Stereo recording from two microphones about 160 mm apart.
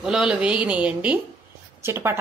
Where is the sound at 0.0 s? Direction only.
5° right (ahead or behind).